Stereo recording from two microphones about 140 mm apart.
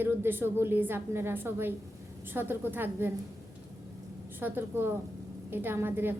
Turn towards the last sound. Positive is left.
turn(degrees=-15)  # may be behind; listen again after turning